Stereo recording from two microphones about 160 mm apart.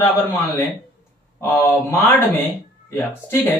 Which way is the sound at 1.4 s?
15° left (ahead or behind).